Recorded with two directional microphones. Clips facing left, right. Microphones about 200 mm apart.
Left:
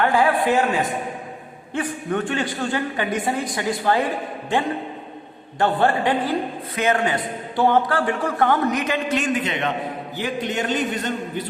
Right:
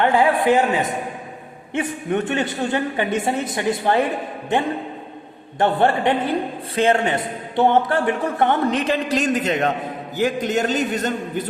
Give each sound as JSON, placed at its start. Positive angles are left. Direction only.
{"t": 0.0, "sound": "a man's voice", "side_deg": -20}
{"t": 1.7, "sound": "a man's voice", "side_deg": -20}
{"t": 5.5, "sound": "a man's voice", "side_deg": -20}